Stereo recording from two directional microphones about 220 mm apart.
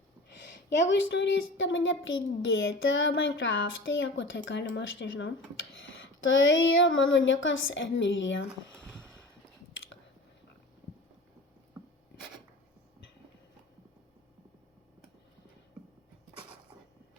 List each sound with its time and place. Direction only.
0.3 s a woman's voice: 50° left (ahead or behind)